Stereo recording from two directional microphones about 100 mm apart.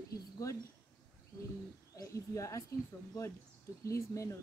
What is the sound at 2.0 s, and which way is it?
Speech, 30° left (ahead or behind).